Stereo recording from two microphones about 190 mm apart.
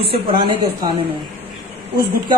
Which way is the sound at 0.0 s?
30° right (ahead or behind).